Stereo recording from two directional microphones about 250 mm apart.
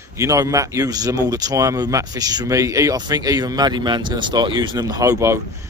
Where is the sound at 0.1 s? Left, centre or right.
Centre.